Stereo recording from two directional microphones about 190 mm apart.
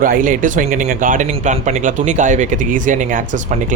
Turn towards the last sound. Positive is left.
turn(degrees=-40)  # may be behind; listen again after turning